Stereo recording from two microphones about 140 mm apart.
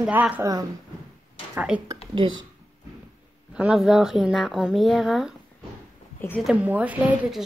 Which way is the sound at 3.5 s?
5° right (ahead or behind).